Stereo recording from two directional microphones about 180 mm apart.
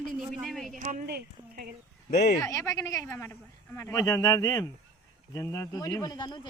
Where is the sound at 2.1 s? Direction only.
60° left (ahead or behind).